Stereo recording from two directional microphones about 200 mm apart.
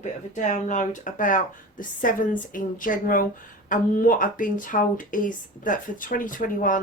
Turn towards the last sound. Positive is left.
turn(degrees=40)  # may be behind; listen again after turning